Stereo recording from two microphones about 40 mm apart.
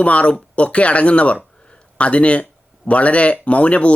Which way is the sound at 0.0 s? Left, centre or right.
Left.